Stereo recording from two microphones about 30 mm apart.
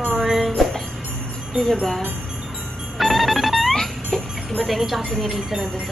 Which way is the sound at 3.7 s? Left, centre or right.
Centre.